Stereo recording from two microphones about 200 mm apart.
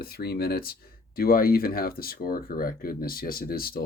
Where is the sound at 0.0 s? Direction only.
50° left (ahead or behind).